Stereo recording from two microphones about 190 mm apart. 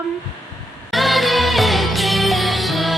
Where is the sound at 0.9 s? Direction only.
Centre (ahead or behind).